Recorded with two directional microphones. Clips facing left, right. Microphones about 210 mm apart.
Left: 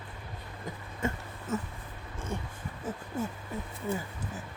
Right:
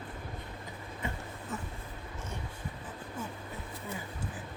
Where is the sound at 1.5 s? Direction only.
40° left (ahead or behind).